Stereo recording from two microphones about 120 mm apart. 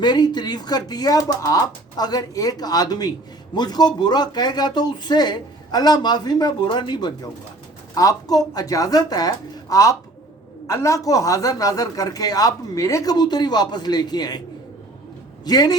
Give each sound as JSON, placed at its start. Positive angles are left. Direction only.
{"t": 0.0, "sound": "a woman's voice", "side_deg": 40}
{"t": 15.4, "sound": "a woman's voice", "side_deg": 35}